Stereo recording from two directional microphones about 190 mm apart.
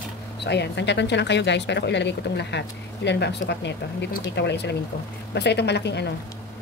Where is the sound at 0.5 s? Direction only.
65° left (ahead or behind).